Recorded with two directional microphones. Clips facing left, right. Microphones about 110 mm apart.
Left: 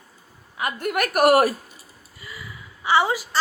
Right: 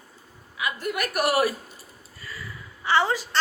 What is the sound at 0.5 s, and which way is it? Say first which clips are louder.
A woman's voice: left 4 dB; 50° left (ahead or behind).